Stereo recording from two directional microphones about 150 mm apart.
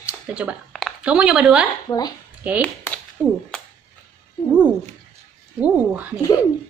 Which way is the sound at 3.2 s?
5° left (ahead or behind).